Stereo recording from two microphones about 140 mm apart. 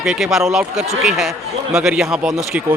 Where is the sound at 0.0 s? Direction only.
Centre (ahead or behind).